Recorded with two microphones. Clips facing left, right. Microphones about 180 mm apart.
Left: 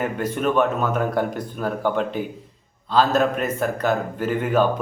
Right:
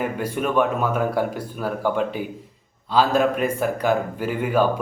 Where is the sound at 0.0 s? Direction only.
10° right (ahead or behind).